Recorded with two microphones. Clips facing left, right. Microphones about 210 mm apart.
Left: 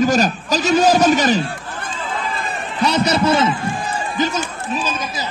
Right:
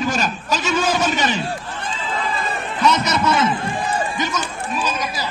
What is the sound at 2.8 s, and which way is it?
Speech, 30° left (ahead or behind).